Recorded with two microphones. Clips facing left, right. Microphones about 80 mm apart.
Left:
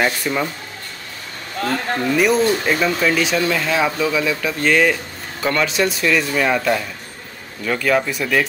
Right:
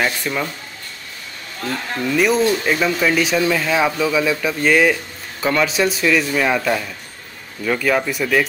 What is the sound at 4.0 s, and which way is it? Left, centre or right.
Speech, centre.